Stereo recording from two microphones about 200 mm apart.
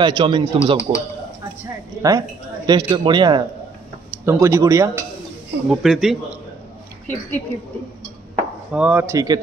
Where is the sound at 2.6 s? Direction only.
20° right (ahead or behind).